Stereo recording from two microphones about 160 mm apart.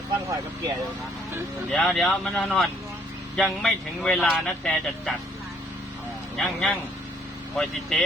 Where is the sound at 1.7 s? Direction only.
5° left (ahead or behind).